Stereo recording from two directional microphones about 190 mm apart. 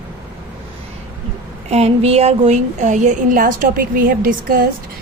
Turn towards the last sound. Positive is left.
turn(degrees=-50)  # may be behind; listen again after turning